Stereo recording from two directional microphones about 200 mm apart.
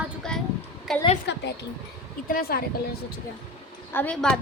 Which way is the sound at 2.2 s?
45° left (ahead or behind).